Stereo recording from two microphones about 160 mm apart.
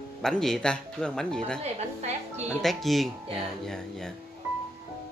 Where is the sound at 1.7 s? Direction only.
45° right (ahead or behind).